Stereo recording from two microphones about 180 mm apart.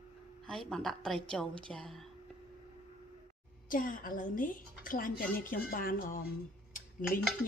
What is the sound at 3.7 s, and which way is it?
A woman's voice, 50° left (ahead or behind).